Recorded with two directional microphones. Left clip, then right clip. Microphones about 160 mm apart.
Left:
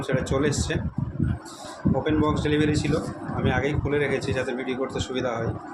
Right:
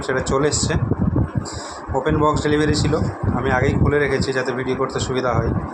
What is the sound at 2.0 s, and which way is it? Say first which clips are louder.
Speech: right 7 dB; 20° right (ahead or behind).